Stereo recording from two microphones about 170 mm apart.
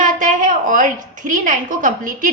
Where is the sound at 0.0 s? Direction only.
50° right (ahead or behind).